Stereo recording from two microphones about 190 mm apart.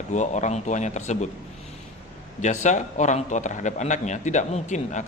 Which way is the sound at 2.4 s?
40° left (ahead or behind).